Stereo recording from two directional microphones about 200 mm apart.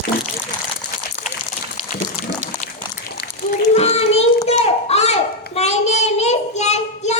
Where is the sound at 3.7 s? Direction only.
30° left (ahead or behind).